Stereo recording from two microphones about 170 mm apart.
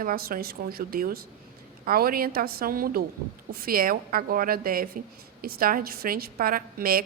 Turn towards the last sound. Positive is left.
turn(degrees=-60)  # may be behind; listen again after turning